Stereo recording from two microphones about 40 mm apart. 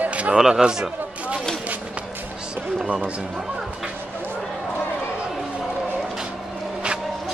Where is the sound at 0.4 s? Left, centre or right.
Centre.